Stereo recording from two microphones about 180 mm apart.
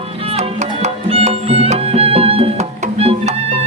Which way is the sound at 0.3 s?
35° right (ahead or behind).